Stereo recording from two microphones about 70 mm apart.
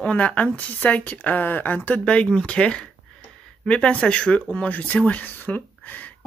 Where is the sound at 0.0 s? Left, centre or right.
Centre.